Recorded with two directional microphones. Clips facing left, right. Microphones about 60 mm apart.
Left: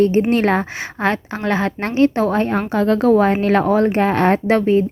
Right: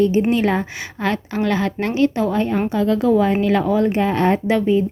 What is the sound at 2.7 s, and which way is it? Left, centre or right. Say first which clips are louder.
A woman's voice: left 4 dB; left.